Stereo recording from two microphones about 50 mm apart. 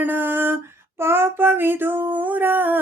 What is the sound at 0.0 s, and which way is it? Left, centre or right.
Female singing, right.